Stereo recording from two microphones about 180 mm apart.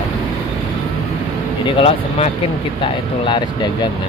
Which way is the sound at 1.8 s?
35° left (ahead or behind).